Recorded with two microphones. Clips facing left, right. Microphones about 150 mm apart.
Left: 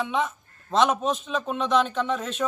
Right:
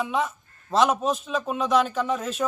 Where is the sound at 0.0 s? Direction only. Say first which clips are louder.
Even; 5° right (ahead or behind).